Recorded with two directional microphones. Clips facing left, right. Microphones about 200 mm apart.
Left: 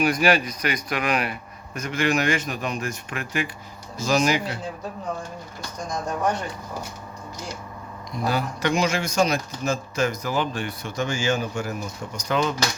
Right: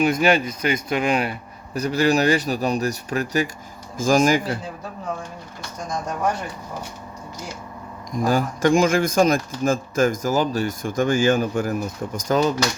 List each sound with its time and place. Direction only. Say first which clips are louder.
0.0 s speech: right 2 dB; 25° right (ahead or behind); by 4.5 s 45° right (ahead or behind)
8.1 s speech: right 5 dB; 45° right (ahead or behind)
12.3 s speech: right 4 dB; 40° right (ahead or behind)